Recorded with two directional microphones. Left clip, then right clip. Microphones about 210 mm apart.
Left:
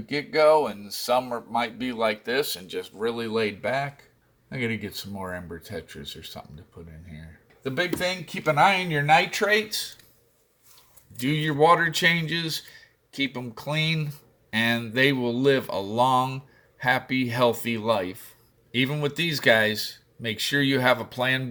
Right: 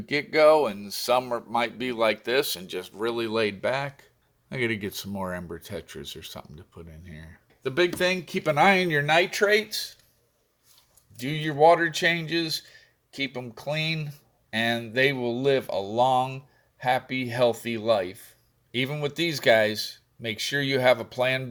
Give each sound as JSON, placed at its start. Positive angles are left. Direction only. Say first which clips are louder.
{"t": 0.0, "sound": "speech", "louder": "right 1 dB", "side_deg": -60}
{"t": 9.0, "sound": "speech", "louder": "left 3 dB", "side_deg": -35}
{"t": 11.2, "sound": "speech", "louder": "right 1 dB", "side_deg": -15}